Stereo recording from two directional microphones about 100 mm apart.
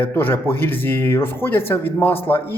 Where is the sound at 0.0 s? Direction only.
20° left (ahead or behind).